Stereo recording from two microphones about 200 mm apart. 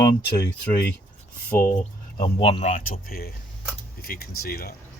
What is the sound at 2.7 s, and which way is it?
Speech, 45° left (ahead or behind).